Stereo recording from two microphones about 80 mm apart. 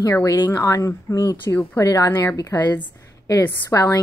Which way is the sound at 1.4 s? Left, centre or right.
Left.